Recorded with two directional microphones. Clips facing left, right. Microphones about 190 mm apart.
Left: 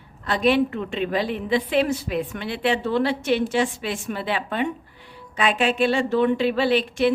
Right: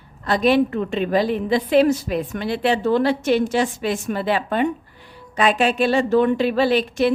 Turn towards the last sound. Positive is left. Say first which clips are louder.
# right 2 dB
turn(degrees=-40)  # may be behind; listen again after turning